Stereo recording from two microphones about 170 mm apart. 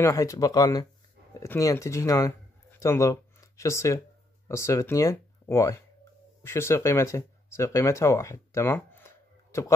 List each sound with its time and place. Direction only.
0.0 s speech: 20° left (ahead or behind)